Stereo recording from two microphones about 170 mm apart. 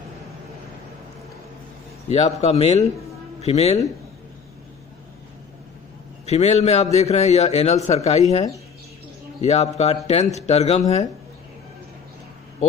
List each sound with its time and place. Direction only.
2.2 s a man's voice: 40° left (ahead or behind)
6.2 s a man's voice: 40° left (ahead or behind)